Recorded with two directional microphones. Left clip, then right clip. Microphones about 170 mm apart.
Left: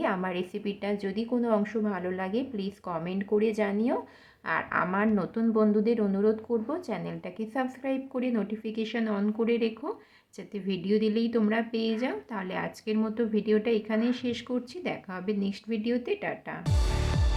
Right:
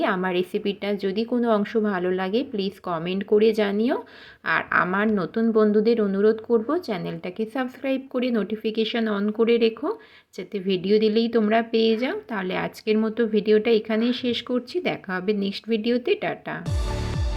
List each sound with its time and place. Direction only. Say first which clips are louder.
0.0 s speech: right 6 dB; 20° right (ahead or behind)